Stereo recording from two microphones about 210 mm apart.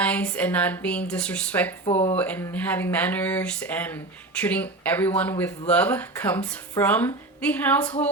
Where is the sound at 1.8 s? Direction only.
30° left (ahead or behind).